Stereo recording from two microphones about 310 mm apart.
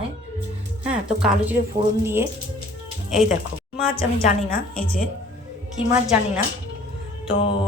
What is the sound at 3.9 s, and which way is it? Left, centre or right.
Speech, left.